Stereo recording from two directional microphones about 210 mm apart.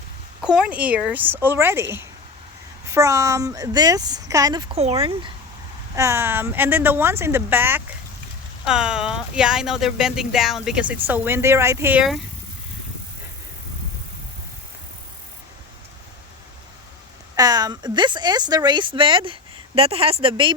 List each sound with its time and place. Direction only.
0.4 s speech: 5° right (ahead or behind); by 5.3 s 25° right (ahead or behind)
6.0 s speech: 10° right (ahead or behind)
17.3 s speech: 20° right (ahead or behind)